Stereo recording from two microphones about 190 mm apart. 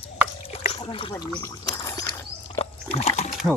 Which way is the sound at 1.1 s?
15° left (ahead or behind).